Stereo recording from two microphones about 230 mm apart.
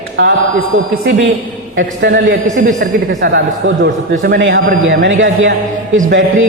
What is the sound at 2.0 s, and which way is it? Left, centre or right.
Speech, right.